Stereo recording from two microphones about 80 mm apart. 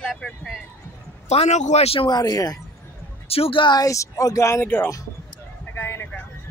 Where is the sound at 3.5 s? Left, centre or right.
Left.